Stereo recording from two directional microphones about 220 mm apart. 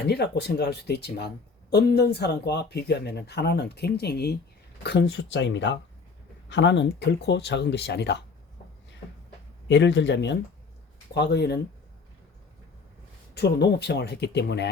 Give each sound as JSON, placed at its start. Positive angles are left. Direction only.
{"t": 0.0, "sound": "speech", "side_deg": 50}
{"t": 9.6, "sound": "speech", "side_deg": 55}
{"t": 13.3, "sound": "speech", "side_deg": 50}